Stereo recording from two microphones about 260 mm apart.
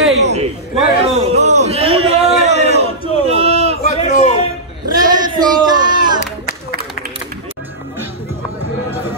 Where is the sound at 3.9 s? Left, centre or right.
Left.